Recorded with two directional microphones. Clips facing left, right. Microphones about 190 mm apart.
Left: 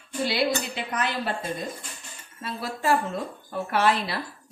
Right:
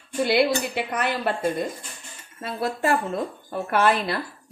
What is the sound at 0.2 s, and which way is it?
A woman's voice, 55° right (ahead or behind).